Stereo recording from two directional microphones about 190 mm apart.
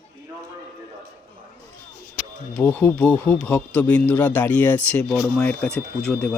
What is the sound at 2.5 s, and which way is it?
Speech, 10° left (ahead or behind).